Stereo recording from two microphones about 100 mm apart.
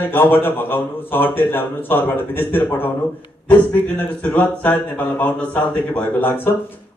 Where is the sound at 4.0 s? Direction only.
15° left (ahead or behind).